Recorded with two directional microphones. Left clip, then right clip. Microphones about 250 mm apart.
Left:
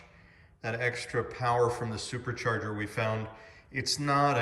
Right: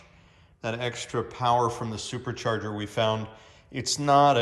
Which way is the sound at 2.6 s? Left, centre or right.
Right.